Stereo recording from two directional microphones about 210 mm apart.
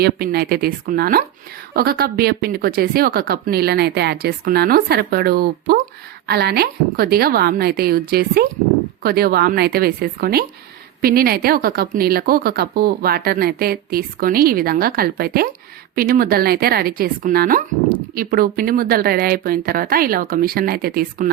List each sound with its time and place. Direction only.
0.0 s a woman's voice: 50° right (ahead or behind)